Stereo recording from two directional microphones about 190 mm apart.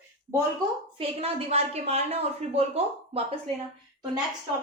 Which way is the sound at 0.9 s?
30° right (ahead or behind).